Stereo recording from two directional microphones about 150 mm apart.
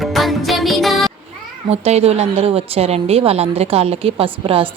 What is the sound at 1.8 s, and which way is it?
Speech, 45° right (ahead or behind).